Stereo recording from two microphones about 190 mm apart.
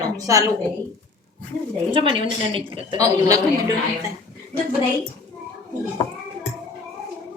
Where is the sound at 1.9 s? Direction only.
30° right (ahead or behind).